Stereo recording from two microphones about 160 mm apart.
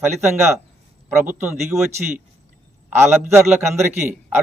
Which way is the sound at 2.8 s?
15° right (ahead or behind).